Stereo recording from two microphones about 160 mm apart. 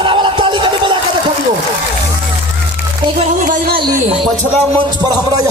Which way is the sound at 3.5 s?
65° right (ahead or behind).